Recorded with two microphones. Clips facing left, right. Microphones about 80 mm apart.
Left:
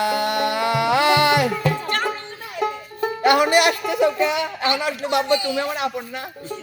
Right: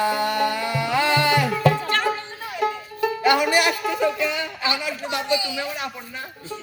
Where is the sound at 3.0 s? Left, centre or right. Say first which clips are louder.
Right 1 dB; left.